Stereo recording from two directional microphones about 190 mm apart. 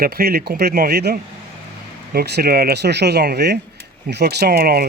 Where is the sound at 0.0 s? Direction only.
55° right (ahead or behind).